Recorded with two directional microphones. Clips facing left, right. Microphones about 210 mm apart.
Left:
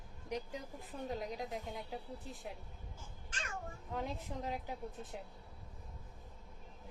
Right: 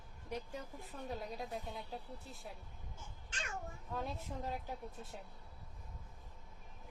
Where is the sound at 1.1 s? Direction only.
15° left (ahead or behind).